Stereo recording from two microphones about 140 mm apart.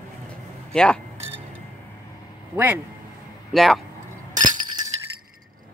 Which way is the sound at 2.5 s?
15° right (ahead or behind).